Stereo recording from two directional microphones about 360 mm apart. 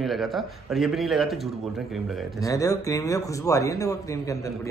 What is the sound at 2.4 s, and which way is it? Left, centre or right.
Speech, centre.